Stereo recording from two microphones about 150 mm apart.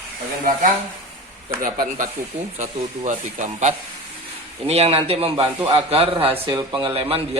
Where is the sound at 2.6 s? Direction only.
55° right (ahead or behind).